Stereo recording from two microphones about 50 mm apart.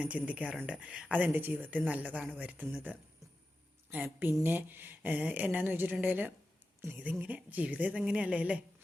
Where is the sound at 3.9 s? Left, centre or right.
Right.